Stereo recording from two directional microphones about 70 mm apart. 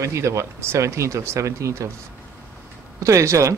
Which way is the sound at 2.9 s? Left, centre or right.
Right.